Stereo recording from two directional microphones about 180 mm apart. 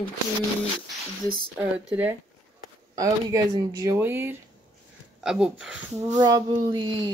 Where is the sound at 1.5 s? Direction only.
10° right (ahead or behind).